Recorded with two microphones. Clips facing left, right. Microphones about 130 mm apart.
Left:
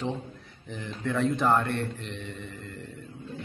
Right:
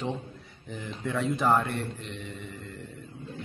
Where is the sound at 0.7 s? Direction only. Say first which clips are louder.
Left 2 dB; 5° right (ahead or behind).